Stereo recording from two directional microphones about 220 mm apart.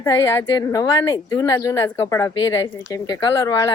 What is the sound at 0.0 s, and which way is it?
Speech, 15° left (ahead or behind).